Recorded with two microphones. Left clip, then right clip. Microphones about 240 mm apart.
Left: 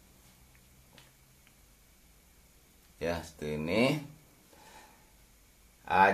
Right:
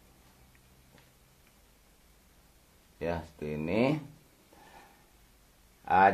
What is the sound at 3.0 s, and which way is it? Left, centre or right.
Speech, right.